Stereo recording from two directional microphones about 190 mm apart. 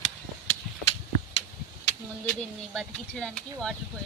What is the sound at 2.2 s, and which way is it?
Speech, 5° left (ahead or behind).